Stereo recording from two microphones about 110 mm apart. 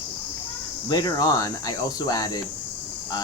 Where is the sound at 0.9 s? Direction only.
40° left (ahead or behind).